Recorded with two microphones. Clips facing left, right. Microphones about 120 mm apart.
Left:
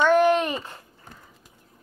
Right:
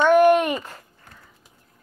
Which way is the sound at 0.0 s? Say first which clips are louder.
Right 3 dB; 10° right (ahead or behind).